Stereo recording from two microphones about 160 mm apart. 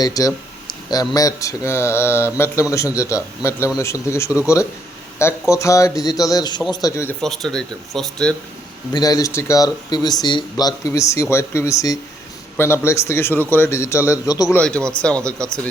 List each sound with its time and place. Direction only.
0.0 s speech: 20° left (ahead or behind)
7.2 s speech: 5° left (ahead or behind)
8.9 s speech: 25° left (ahead or behind)
15.0 s speech: 5° left (ahead or behind)